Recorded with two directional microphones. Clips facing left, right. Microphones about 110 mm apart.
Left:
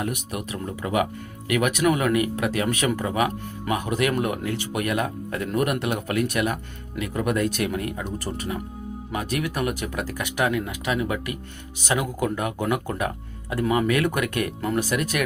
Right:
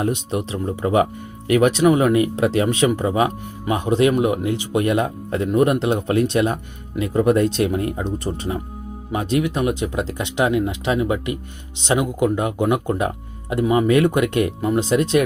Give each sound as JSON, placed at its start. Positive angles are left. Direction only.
{"t": 0.0, "sound": "speech", "side_deg": -25}